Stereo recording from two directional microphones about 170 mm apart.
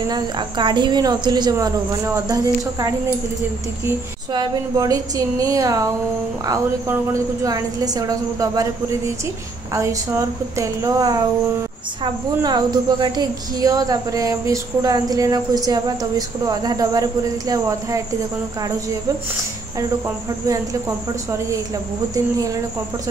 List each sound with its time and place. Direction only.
0.1 s speech: 25° right (ahead or behind)
4.3 s speech: 20° right (ahead or behind)
21.1 s a woman's voice: 15° right (ahead or behind)